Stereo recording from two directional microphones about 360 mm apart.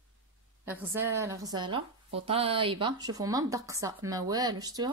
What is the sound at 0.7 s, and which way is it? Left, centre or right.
A woman's voice, centre.